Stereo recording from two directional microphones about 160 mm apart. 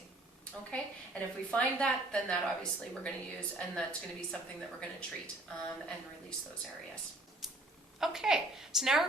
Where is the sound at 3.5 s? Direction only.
5° left (ahead or behind).